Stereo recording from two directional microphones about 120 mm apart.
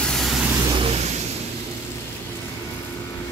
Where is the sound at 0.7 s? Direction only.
60° right (ahead or behind).